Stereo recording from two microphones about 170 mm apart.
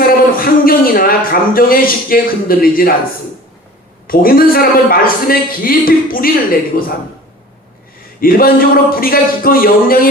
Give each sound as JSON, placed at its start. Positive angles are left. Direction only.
{"t": 0.3, "sound": "a man's voice", "side_deg": 60}
{"t": 4.0, "sound": "a man's voice", "side_deg": 60}
{"t": 8.2, "sound": "a man's voice", "side_deg": 60}